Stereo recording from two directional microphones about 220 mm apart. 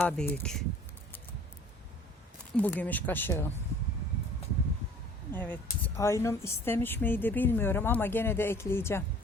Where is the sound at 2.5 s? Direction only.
5° left (ahead or behind).